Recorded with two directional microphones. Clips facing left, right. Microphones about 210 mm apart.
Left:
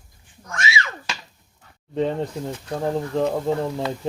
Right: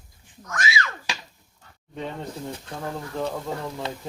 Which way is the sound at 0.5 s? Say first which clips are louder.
Left 1 dB; 25° left (ahead or behind).